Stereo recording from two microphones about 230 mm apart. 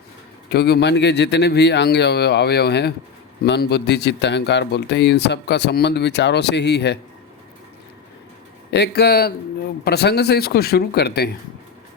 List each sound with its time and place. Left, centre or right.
0.5 s speech: left
8.7 s speech: left